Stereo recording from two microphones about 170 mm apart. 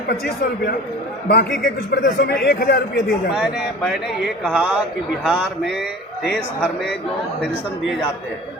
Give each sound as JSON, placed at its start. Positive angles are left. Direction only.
{"t": 1.3, "sound": "a man's voice", "side_deg": 85}
{"t": 3.3, "sound": "speech", "side_deg": 0}